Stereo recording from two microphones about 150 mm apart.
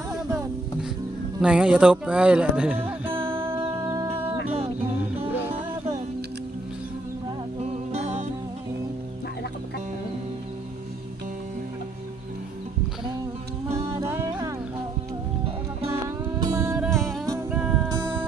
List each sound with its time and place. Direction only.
1.4 s speech: 5° right (ahead or behind)
3.1 s music: 35° right (ahead or behind)
3.8 s music: 25° right (ahead or behind)
7.6 s music: 45° right (ahead or behind)
13.7 s music: 20° right (ahead or behind)
16.3 s music: 25° right (ahead or behind)
16.7 s music: 5° right (ahead or behind)